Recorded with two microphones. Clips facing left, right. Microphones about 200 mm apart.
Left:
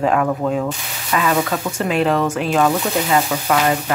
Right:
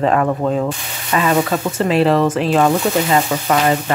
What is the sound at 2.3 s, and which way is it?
Speech, centre (ahead or behind).